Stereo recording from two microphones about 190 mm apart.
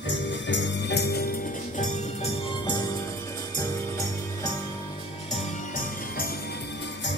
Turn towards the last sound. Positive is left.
turn(degrees=50)  # may be behind; listen again after turning